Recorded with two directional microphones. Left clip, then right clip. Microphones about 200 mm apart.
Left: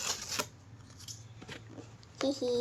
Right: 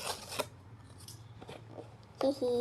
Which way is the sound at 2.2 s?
Centre (ahead or behind).